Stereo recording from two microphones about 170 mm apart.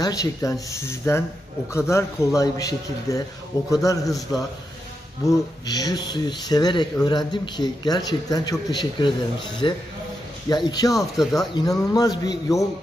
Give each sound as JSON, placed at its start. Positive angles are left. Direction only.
{"t": 0.0, "sound": "speech", "side_deg": 20}
{"t": 5.2, "sound": "speech", "side_deg": 20}
{"t": 10.9, "sound": "speech", "side_deg": 0}
{"t": 11.3, "sound": "speech", "side_deg": 20}